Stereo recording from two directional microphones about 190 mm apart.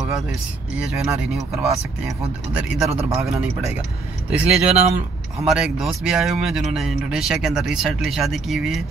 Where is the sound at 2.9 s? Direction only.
15° right (ahead or behind).